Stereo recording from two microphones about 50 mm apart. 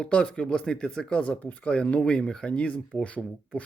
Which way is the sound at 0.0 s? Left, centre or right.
Centre.